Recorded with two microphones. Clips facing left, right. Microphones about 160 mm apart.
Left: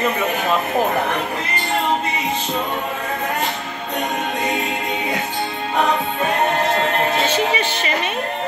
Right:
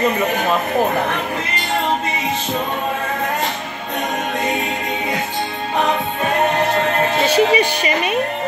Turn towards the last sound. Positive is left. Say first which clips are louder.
# right 5 dB
turn(degrees=-10)  # may be behind; listen again after turning